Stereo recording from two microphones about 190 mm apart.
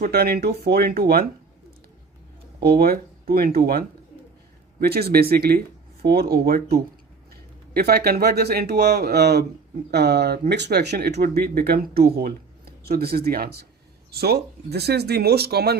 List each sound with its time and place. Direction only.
0.1 s speech: 55° right (ahead or behind)
2.6 s speech: 55° right (ahead or behind)